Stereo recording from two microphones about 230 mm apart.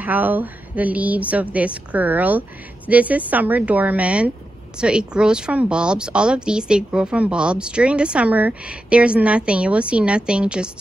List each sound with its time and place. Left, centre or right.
0.0 s speech: centre